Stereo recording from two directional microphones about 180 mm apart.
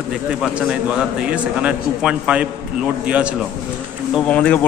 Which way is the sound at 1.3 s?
5° right (ahead or behind).